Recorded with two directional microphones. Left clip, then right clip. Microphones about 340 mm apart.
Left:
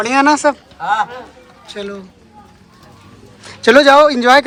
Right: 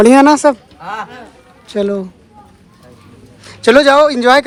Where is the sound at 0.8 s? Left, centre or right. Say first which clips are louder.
Left 9 dB; left.